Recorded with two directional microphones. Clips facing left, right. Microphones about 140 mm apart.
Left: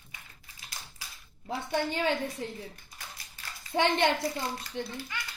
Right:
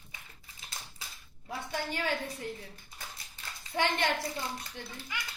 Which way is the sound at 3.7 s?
25° left (ahead or behind).